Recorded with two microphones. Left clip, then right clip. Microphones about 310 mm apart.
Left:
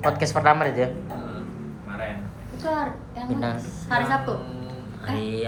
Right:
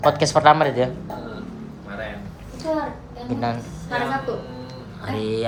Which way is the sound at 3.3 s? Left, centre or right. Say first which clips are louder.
Right 3 dB; centre.